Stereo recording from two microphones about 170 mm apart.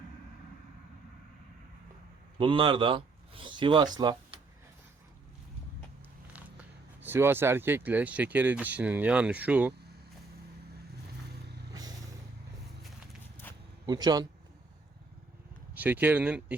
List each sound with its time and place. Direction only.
2.4 s speech: 30° right (ahead or behind)
6.3 s speech: 10° right (ahead or behind)
11.7 s music: 20° right (ahead or behind)
13.8 s speech: 25° right (ahead or behind)
15.7 s speech: 10° right (ahead or behind)